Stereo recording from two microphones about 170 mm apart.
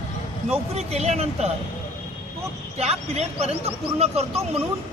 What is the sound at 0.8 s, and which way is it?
Speech, 40° right (ahead or behind).